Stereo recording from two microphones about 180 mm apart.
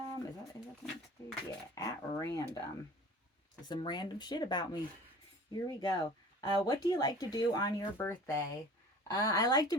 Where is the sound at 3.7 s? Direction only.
25° left (ahead or behind).